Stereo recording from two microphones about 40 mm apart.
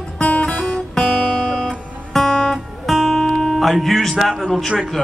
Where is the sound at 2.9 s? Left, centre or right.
Centre.